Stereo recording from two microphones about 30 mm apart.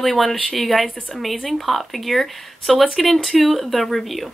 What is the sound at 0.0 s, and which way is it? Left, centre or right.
Speech, centre.